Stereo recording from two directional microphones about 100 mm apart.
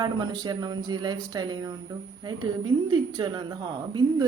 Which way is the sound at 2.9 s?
45° right (ahead or behind).